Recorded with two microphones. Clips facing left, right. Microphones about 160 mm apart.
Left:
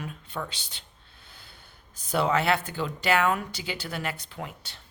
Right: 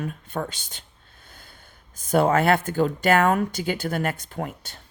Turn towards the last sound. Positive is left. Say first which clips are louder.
# right 7 dB
turn(degrees=-50)  # may be behind; listen again after turning